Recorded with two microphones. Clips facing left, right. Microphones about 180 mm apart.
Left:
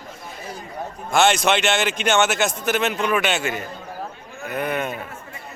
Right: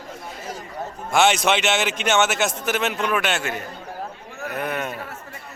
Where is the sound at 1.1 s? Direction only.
5° right (ahead or behind).